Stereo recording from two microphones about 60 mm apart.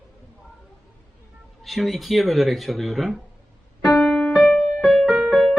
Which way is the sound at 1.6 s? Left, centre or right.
Centre.